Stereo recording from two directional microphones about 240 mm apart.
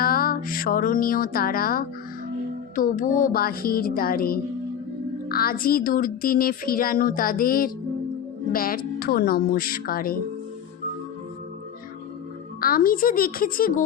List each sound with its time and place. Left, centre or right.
0.0 s music: left
2.7 s speech: left
12.5 s speech: left